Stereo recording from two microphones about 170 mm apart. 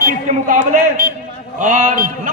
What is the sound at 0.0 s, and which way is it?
A man's voice, 50° right (ahead or behind).